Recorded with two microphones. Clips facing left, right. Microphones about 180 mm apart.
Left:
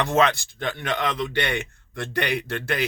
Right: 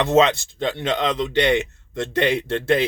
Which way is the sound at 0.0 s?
20° right (ahead or behind).